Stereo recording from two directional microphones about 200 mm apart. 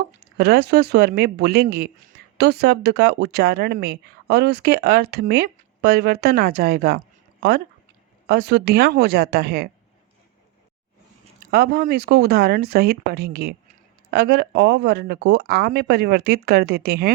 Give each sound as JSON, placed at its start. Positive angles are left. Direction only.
{"t": 0.3, "sound": "speech", "side_deg": -55}
{"t": 8.3, "sound": "speech", "side_deg": -55}
{"t": 11.3, "sound": "speech", "side_deg": -50}